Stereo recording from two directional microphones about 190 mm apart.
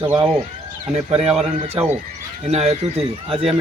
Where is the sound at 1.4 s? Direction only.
30° right (ahead or behind).